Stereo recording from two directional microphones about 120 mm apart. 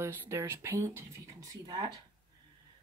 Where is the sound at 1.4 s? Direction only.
35° right (ahead or behind).